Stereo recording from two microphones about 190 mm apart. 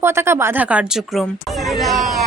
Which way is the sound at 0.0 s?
15° right (ahead or behind).